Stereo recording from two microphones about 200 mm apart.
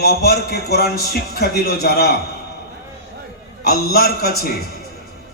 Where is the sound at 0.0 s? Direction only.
50° left (ahead or behind).